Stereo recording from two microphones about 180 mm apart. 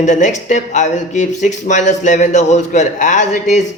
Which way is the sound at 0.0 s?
40° left (ahead or behind).